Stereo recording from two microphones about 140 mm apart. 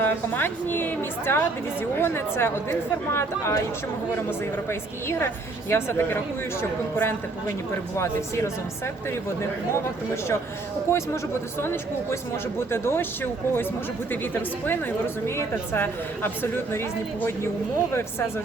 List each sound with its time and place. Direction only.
0.0 s a woman's voice: 15° left (ahead or behind)
10.9 s speech: 20° left (ahead or behind)
12.5 s a woman's voice: 15° left (ahead or behind)
14.1 s a woman's voice: 15° left (ahead or behind)